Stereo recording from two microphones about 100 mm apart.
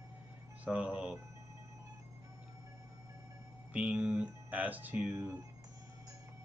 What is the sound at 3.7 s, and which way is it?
Speech, 10° right (ahead or behind).